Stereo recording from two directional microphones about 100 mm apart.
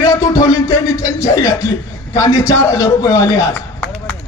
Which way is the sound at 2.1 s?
40° left (ahead or behind).